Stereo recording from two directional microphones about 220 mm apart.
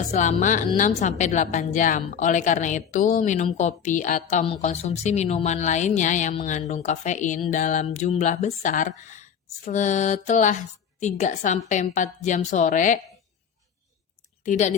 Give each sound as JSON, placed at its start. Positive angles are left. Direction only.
{"t": 0.1, "sound": "a woman's voice", "side_deg": 35}
{"t": 14.4, "sound": "speech", "side_deg": 35}